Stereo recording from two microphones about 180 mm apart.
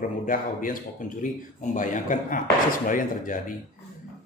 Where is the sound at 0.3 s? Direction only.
50° left (ahead or behind).